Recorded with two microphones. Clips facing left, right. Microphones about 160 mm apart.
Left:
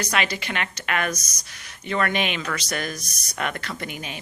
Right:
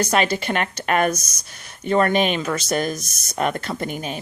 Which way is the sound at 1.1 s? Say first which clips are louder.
Right 4 dB; 30° right (ahead or behind).